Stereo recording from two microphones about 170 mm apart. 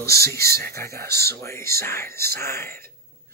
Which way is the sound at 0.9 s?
70° right (ahead or behind).